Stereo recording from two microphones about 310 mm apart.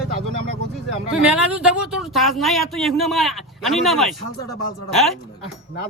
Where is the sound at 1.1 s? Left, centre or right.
Centre.